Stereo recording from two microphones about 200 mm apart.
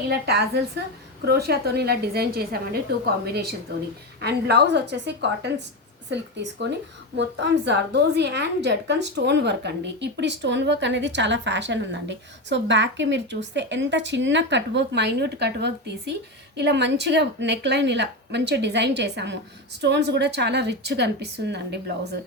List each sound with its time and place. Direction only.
0.1 s a woman's voice: 55° right (ahead or behind)
4.2 s a woman's voice: 55° right (ahead or behind)